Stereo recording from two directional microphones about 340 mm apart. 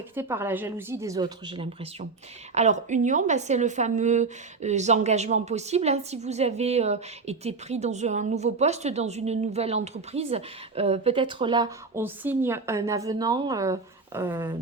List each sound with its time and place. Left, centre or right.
0.2 s a woman's voice: centre